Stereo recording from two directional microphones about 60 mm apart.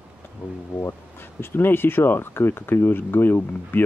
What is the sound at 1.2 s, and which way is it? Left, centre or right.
Speech, left.